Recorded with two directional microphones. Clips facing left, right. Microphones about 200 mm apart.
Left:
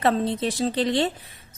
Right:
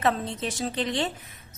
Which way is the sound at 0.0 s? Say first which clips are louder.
Left 4 dB; 35° left (ahead or behind).